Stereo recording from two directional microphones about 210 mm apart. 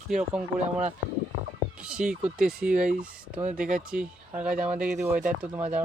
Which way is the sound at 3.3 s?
35° right (ahead or behind).